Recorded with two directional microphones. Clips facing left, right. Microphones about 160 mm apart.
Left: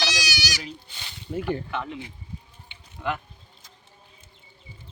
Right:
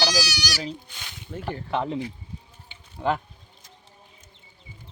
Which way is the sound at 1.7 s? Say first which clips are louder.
Right 6 dB; 35° right (ahead or behind).